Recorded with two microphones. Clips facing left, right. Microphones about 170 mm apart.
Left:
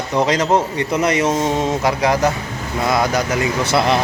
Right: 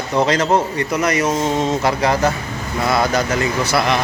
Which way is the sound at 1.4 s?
15° left (ahead or behind).